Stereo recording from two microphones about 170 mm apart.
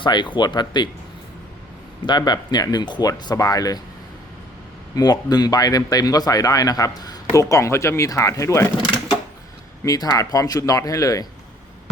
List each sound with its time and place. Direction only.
0.0 s speech: 25° left (ahead or behind)
2.0 s speech: 25° left (ahead or behind)
4.9 s speech: 25° left (ahead or behind)